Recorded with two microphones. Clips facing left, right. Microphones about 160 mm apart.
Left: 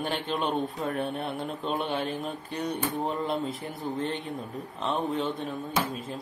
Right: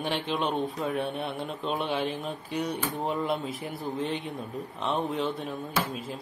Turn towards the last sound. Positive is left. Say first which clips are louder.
# left 1 dB
turn(degrees=0)  # may be behind; listen again after turning